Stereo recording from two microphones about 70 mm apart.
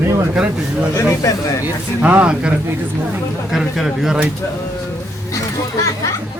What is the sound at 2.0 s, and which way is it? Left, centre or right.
Speech, centre.